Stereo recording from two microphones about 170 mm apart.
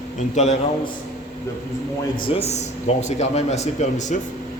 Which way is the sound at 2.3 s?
40° left (ahead or behind).